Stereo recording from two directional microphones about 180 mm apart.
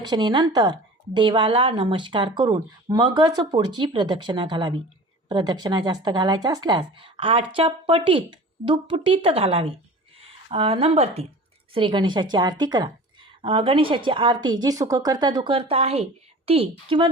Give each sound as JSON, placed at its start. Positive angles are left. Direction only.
{"t": 0.0, "sound": "a woman's voice", "side_deg": -25}